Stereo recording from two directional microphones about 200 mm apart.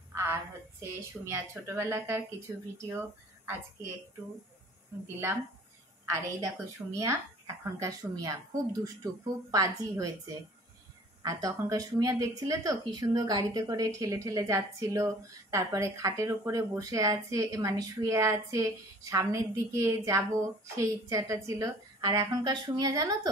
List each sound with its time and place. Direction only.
0.1 s a woman's voice: 15° right (ahead or behind)
5.0 s a woman's voice: 15° right (ahead or behind)
11.2 s a woman's voice: 15° right (ahead or behind)